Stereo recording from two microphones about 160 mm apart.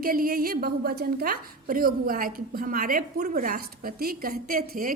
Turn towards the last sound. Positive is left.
turn(degrees=-65)  # may be behind; listen again after turning